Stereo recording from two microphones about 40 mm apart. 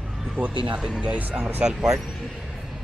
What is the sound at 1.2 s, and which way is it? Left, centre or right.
Speech, right.